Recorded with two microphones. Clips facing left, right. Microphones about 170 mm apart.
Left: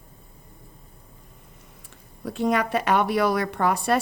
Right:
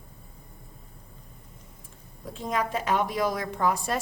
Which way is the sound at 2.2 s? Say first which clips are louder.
Left 6 dB; 70° left (ahead or behind).